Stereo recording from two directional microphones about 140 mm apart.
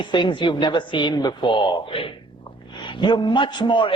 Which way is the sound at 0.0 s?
35° left (ahead or behind).